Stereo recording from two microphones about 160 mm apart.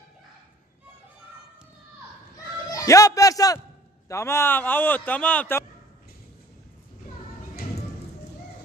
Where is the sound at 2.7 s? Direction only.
20° left (ahead or behind).